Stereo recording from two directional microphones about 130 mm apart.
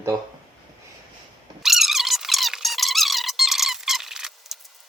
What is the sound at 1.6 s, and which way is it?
Squeak, centre (ahead or behind).